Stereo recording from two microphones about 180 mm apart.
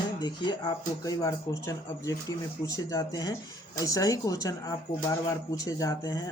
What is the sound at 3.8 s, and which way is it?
Speech, 20° left (ahead or behind).